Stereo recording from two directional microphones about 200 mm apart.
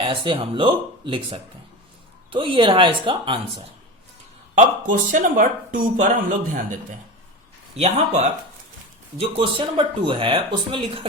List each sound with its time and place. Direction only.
0.0 s speech: 25° right (ahead or behind)
4.5 s speech: 40° right (ahead or behind)
7.8 s speech: 35° right (ahead or behind)